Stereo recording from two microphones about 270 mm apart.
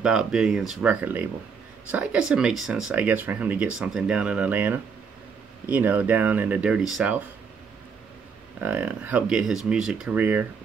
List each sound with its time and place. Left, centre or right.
0.0 s speech: centre
8.6 s speech: centre